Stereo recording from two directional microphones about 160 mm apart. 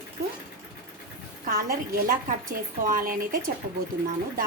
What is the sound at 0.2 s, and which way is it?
Sewing machine, 80° right.